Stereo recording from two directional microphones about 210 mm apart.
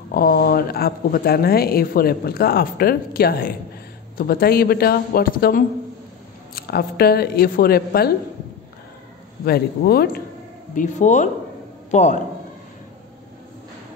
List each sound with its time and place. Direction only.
0.1 s speech: 45° left (ahead or behind)
9.4 s speech: 50° left (ahead or behind)
10.7 s speech: 35° left (ahead or behind)